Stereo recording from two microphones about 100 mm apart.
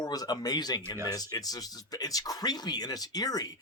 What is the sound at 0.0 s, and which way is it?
Speech, 40° left (ahead or behind).